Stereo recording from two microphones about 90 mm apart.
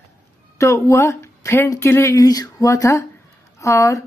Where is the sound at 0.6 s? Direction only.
35° left (ahead or behind).